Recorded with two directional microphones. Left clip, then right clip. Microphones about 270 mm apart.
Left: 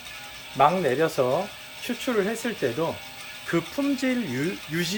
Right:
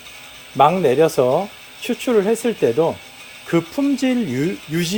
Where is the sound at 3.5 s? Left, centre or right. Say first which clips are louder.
Right 7 dB; right.